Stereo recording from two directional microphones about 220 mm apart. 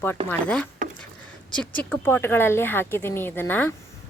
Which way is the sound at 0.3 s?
5° left (ahead or behind).